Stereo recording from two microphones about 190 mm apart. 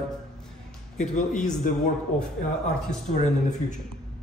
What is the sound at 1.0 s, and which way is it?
Speech, 40° left (ahead or behind).